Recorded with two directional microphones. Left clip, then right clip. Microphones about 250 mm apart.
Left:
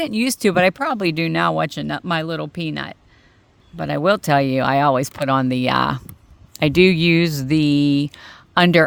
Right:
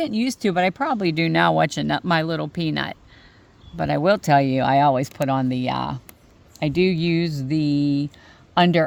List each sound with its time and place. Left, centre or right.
0.0 s speech: left